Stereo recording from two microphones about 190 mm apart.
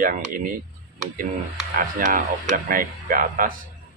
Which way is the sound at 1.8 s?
45° right (ahead or behind).